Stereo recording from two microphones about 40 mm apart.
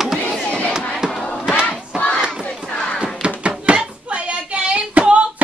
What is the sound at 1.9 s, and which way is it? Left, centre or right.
Battle cry, right.